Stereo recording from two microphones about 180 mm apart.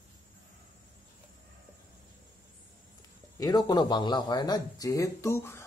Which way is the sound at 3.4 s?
20° left (ahead or behind).